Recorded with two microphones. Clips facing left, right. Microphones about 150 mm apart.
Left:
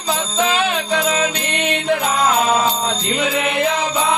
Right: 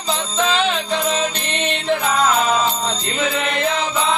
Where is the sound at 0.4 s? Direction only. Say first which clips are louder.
Even; 10° left (ahead or behind).